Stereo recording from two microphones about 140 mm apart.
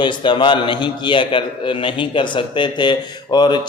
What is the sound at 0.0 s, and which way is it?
A man's voice, 35° left (ahead or behind).